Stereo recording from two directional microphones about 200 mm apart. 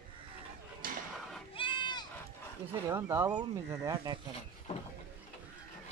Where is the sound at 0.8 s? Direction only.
45° right (ahead or behind).